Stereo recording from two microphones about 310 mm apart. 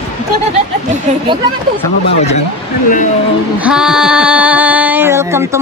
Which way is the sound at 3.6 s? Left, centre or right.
Centre.